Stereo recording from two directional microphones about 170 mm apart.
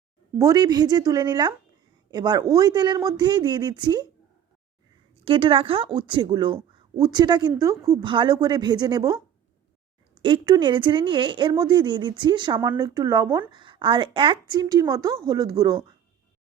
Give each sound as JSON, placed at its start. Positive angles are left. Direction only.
{"t": 0.3, "sound": "speech", "side_deg": -20}
{"t": 5.2, "sound": "speech", "side_deg": -30}
{"t": 8.0, "sound": "speech", "side_deg": -30}